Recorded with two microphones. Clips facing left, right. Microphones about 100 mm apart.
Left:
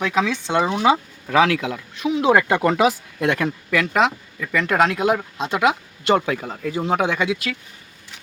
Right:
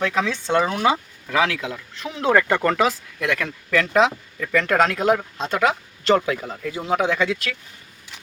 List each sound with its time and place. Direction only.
0.0 s speech: 15° left (ahead or behind)
1.7 s speech: 10° left (ahead or behind)
3.2 s speech: 25° left (ahead or behind)
3.7 s speech: 5° left (ahead or behind)
6.2 s speech: 25° left (ahead or behind)
7.1 s speech: 15° left (ahead or behind)